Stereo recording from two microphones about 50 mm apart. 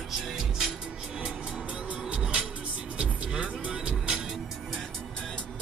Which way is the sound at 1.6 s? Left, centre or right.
Right.